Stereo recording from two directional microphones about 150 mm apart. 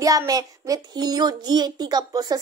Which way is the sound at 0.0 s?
25° right (ahead or behind).